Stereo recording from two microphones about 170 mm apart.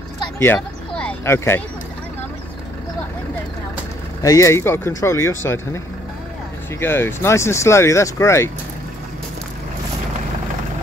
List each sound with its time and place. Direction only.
0.4 s a sound: 10° left (ahead or behind)
4.2 s speech: 20° left (ahead or behind)
6.8 s speech: 15° left (ahead or behind)